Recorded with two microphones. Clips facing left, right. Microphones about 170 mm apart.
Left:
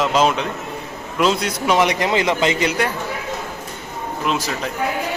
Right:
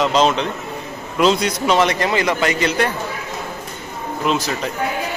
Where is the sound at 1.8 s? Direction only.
15° left (ahead or behind).